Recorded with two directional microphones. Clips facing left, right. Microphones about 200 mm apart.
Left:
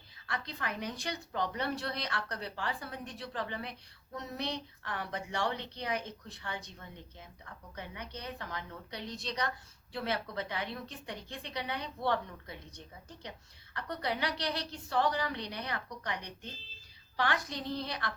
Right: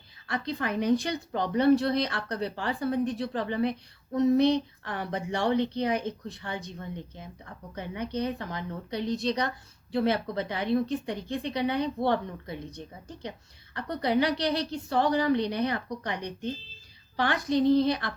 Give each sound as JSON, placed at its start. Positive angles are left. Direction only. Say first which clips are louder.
{"t": 0.3, "sound": "a woman's voice", "louder": "right 8 dB", "side_deg": -25}
{"t": 13.7, "sound": "speech", "louder": "right 10 dB", "side_deg": -25}
{"t": 17.2, "sound": "speech", "louder": "right 9 dB", "side_deg": -25}